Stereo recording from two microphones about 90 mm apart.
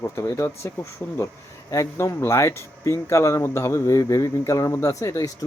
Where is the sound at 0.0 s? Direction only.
35° left (ahead or behind).